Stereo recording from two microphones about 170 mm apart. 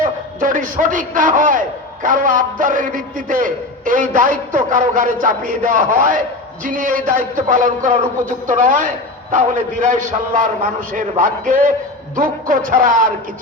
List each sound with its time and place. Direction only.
0.0 s a man's voice: 50° right (ahead or behind)